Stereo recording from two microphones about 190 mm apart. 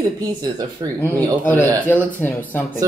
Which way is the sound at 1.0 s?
10° left (ahead or behind).